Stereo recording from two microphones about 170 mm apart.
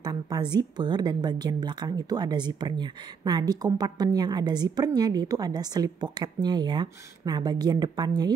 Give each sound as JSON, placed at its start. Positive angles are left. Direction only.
{"t": 0.0, "sound": "a woman's voice", "side_deg": -25}